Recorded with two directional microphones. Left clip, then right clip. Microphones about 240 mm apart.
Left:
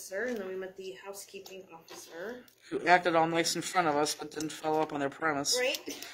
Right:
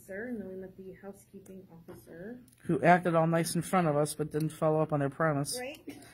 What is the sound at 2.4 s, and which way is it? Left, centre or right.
Speech, right.